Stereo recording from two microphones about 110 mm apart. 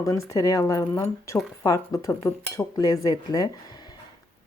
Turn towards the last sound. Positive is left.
turn(degrees=35)  # may be behind; listen again after turning